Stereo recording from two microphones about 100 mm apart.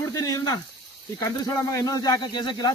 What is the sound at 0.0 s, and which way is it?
Speech, 40° left (ahead or behind).